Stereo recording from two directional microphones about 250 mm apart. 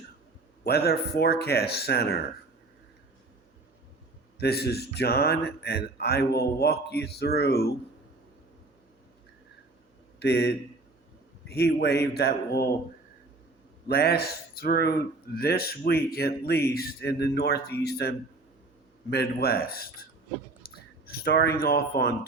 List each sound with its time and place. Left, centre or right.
0.6 s speech: left
4.4 s speech: left
10.2 s speech: left
13.8 s speech: left
19.1 s speech: left
20.6 s a sound: left
21.2 s speech: left